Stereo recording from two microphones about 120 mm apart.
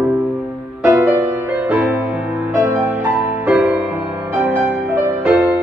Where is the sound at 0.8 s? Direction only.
20° right (ahead or behind).